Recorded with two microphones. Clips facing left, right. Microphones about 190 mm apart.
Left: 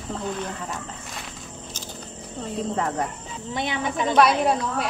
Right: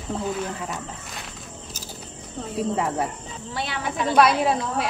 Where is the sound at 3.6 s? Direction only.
20° left (ahead or behind).